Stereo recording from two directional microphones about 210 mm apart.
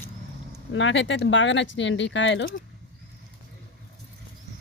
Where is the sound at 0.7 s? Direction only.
60° left (ahead or behind).